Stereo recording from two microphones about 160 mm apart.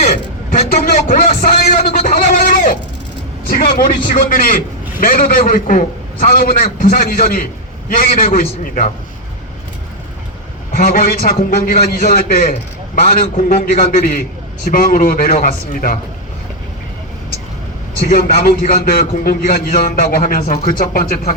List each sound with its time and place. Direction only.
0.7 s a sound: 65° left (ahead or behind)
3.5 s a man's voice: 65° left (ahead or behind)
10.7 s a man's voice: 65° left (ahead or behind)
18.1 s a man's voice: 70° left (ahead or behind)